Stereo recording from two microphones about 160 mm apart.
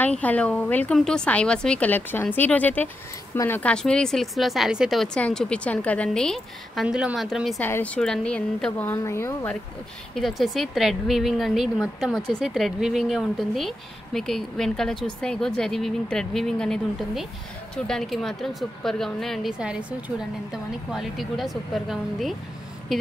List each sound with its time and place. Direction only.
0.0 s a woman's voice: 10° left (ahead or behind)
7.6 s a woman's voice: 10° left (ahead or behind)
10.1 s speech: centre (ahead or behind)